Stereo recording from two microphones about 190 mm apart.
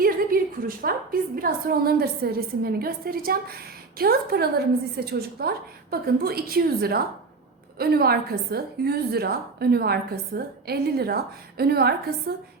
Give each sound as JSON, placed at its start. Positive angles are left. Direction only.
{"t": 0.0, "sound": "a woman's voice", "side_deg": -50}